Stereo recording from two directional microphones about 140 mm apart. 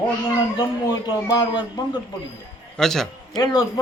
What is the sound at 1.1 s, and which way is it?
Speech, 30° left (ahead or behind).